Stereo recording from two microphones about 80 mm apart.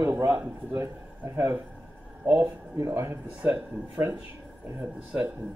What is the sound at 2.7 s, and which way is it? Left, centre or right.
Speech, right.